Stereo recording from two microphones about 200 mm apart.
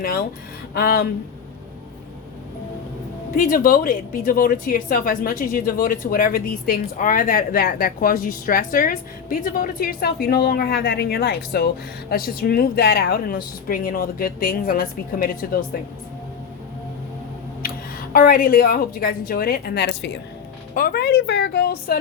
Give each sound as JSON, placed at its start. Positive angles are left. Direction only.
{"t": 0.0, "sound": "a woman's voice", "side_deg": 45}
{"t": 3.3, "sound": "a woman's voice", "side_deg": 45}
{"t": 18.1, "sound": "a woman's voice", "side_deg": 45}